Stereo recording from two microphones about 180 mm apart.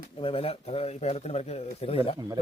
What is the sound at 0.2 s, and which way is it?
Speech, 30° left (ahead or behind).